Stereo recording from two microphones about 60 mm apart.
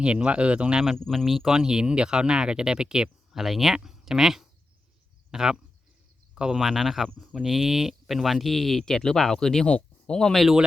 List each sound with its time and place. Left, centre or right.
0.0 s speech: centre
0.9 s speech: centre
9.6 s speech: centre
10.2 s speech: centre